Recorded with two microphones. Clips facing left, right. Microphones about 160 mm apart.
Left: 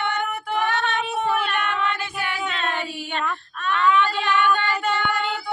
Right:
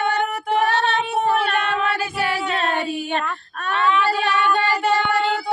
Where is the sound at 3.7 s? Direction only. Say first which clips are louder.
Right 1 dB; 30° right (ahead or behind).